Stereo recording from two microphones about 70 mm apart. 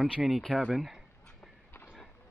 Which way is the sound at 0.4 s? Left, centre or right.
Centre.